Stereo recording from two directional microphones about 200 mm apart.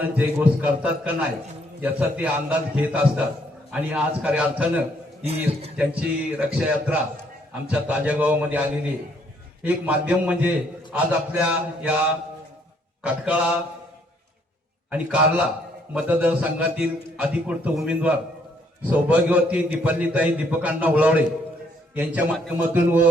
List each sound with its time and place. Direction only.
0.0 s a man's voice: 10° right (ahead or behind)
9.6 s a man's voice: 10° right (ahead or behind)
14.8 s a man's voice: 5° right (ahead or behind)